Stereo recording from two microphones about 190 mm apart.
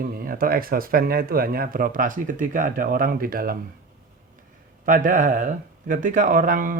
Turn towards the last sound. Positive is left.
turn(degrees=-45)  # may be behind; listen again after turning